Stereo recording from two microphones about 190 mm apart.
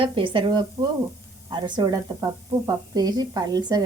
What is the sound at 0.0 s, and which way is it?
Speech, 25° right (ahead or behind).